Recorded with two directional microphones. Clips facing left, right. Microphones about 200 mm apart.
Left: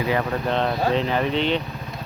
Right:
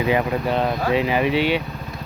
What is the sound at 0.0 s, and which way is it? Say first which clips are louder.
Speech: right 3 dB; 15° right (ahead or behind).